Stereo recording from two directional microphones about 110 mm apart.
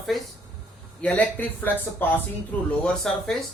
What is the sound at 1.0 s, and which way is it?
Speech, 15° left (ahead or behind).